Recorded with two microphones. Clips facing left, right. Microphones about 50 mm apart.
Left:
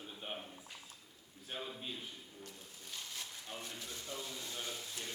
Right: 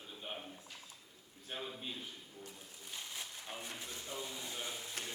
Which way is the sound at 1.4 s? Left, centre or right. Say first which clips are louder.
Even; centre.